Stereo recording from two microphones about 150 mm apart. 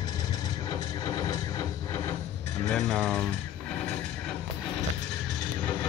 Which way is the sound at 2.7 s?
5° left (ahead or behind).